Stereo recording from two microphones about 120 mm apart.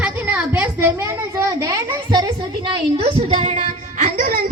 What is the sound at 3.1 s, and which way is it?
Child singing, 50° right (ahead or behind).